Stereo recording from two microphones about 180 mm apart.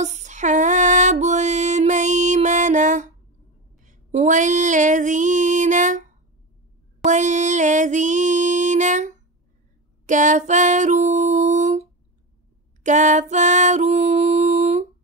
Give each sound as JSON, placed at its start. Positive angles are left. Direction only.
{"t": 0.0, "sound": "female singing", "side_deg": -40}
{"t": 7.1, "sound": "music", "side_deg": -40}